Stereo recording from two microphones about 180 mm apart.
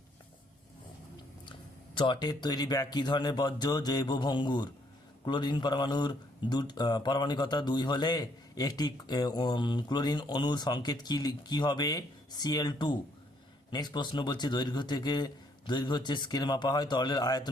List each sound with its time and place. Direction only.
2.0 s speech: 25° left (ahead or behind)